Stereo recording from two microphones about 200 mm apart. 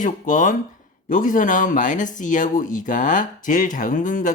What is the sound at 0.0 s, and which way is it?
Speech, 40° left (ahead or behind).